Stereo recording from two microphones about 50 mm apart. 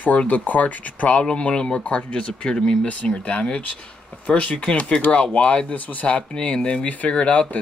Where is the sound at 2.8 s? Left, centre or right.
Left.